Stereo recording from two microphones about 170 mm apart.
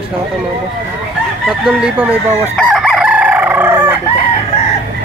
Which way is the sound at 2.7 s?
Centre (ahead or behind).